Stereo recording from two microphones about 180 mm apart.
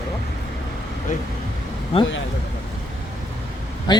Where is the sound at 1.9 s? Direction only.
30° left (ahead or behind).